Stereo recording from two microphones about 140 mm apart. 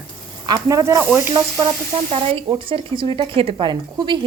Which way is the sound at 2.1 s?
45° right (ahead or behind).